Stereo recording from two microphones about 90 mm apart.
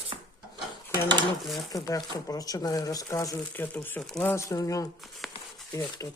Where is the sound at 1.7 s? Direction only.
40° left (ahead or behind).